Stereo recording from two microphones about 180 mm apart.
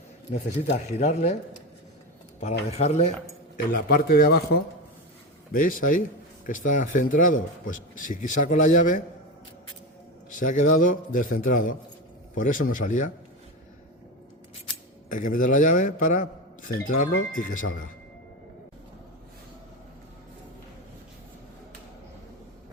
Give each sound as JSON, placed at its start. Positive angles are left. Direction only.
{"t": 0.3, "sound": "speech", "side_deg": 35}
{"t": 2.6, "sound": "speech", "side_deg": 35}
{"t": 3.7, "sound": "a man's voice", "side_deg": 55}
{"t": 5.5, "sound": "a man's voice", "side_deg": 50}
{"t": 10.2, "sound": "a man's voice", "side_deg": 45}
{"t": 15.1, "sound": "a man's voice", "side_deg": 50}